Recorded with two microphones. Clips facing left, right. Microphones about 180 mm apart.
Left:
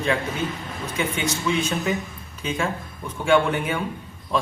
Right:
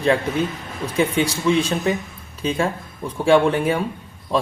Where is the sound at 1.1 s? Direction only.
35° right (ahead or behind).